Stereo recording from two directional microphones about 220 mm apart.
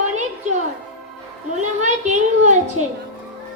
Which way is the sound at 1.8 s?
35° right (ahead or behind).